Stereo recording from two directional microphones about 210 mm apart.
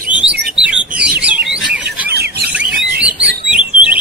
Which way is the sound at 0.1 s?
5° right (ahead or behind).